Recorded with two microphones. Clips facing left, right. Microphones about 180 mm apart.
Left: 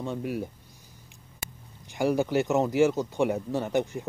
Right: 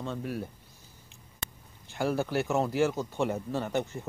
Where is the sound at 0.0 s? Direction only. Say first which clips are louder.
Left 3 dB; 15° left (ahead or behind).